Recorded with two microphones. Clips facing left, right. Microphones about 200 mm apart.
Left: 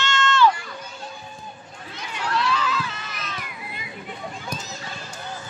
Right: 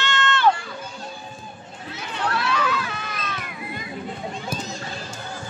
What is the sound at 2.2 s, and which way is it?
Run, 60° right (ahead or behind).